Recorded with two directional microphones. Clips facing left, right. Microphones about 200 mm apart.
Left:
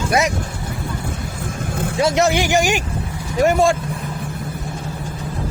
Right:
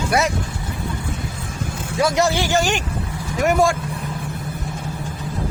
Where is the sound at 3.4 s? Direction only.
25° left (ahead or behind).